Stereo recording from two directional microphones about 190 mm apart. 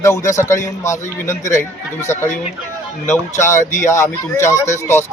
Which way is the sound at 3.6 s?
40° left (ahead or behind).